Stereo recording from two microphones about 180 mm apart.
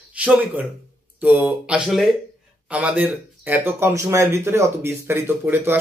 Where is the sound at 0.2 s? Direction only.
10° right (ahead or behind).